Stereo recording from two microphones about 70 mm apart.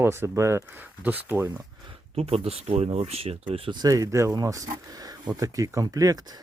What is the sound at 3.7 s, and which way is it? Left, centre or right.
Speech, right.